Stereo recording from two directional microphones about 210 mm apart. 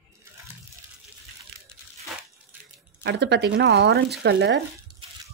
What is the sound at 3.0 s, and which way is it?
Speech, 55° right (ahead or behind).